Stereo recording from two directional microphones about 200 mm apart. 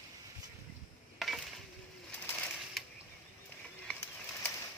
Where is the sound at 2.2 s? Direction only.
5° left (ahead or behind).